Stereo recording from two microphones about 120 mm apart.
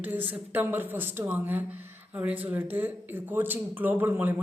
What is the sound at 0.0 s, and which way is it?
Speech, 15° right (ahead or behind).